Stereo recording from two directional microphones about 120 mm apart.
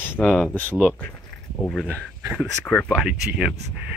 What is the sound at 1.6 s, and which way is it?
Speech, 10° left (ahead or behind).